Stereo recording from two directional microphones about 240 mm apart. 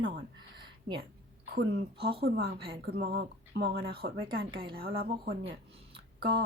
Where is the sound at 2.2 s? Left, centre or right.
Right.